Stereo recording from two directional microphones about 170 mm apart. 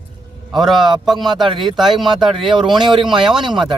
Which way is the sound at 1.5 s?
30° right (ahead or behind).